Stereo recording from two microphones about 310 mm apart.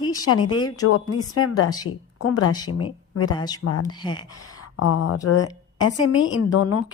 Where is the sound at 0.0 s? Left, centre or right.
Centre.